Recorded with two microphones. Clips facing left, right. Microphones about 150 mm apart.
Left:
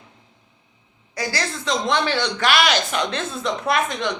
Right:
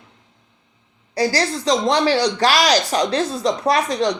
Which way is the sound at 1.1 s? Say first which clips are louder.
Right 7 dB; 35° right (ahead or behind).